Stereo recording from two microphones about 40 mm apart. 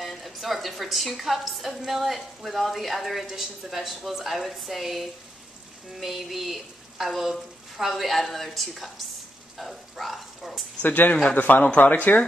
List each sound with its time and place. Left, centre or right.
0.0 s a woman's voice: centre
9.6 s a sound: centre
10.8 s speech: left